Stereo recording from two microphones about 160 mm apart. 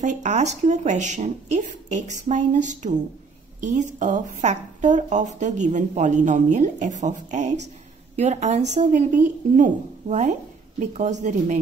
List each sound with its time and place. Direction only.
0.0 s speech: 50° right (ahead or behind)